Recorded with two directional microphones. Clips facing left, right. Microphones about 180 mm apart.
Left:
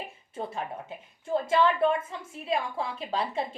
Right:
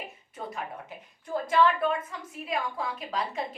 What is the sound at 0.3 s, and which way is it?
A woman's voice, 25° left (ahead or behind).